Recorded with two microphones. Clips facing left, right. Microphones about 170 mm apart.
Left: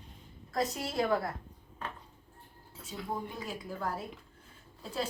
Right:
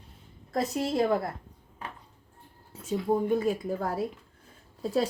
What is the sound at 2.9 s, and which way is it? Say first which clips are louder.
Speech: right 11 dB; 35° right (ahead or behind).